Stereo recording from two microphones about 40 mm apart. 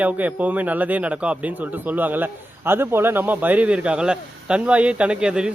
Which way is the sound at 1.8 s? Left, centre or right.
Right.